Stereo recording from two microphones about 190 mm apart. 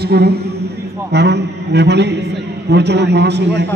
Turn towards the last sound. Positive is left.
turn(degrees=-65)  # may be behind; listen again after turning